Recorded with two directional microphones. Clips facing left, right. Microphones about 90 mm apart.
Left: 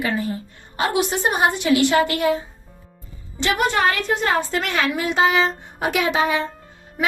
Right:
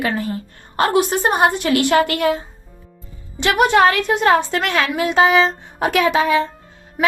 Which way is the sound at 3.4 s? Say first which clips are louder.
Right 6 dB; 70° right (ahead or behind).